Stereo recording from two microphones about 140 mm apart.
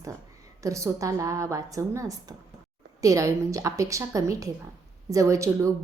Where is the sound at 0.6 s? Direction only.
20° right (ahead or behind).